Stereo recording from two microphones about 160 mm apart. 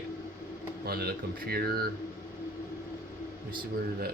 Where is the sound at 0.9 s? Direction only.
75° right (ahead or behind).